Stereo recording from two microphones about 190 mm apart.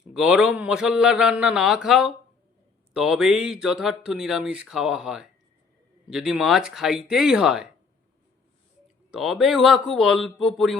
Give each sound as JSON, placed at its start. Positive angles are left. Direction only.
{"t": 0.1, "sound": "speech", "side_deg": -5}
{"t": 9.1, "sound": "speech", "side_deg": 0}